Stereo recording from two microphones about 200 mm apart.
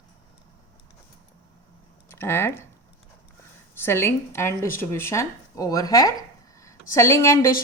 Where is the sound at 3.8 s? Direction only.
10° left (ahead or behind).